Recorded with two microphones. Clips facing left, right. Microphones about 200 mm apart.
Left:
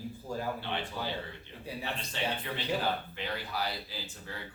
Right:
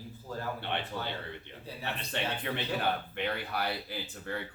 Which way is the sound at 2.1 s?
60° right (ahead or behind).